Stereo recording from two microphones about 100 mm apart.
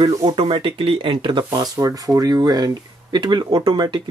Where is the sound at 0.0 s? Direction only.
50° right (ahead or behind).